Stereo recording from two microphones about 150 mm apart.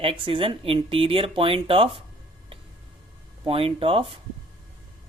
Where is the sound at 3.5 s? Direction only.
40° right (ahead or behind).